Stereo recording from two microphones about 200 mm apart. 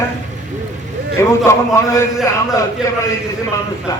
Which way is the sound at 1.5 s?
15° left (ahead or behind).